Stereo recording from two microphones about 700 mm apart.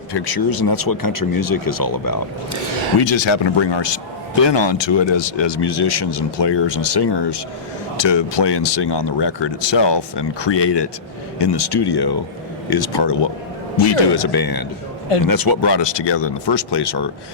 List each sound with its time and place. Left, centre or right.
0.1 s speech: left
3.0 s speech: left